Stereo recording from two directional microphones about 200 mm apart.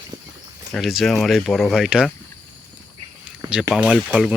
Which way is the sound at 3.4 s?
5° right (ahead or behind).